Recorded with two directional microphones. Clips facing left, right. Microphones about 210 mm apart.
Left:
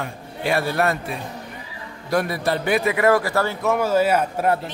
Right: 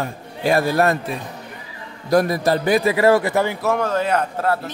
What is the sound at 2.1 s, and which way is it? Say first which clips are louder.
A man's voice: right 5 dB; 40° right (ahead or behind).